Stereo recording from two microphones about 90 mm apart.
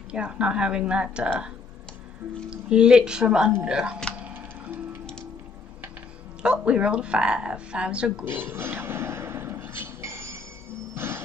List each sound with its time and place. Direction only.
0.1 s a woman's voice: 10° right (ahead or behind)
2.5 s a woman's voice: 10° right (ahead or behind)
4.2 s music: 20° right (ahead or behind)
6.4 s a woman's voice: 10° right (ahead or behind)
8.3 s a sound: 25° right (ahead or behind)